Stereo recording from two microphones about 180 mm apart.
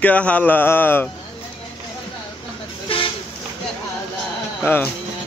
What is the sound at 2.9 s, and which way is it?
Vehicle, 30° left (ahead or behind).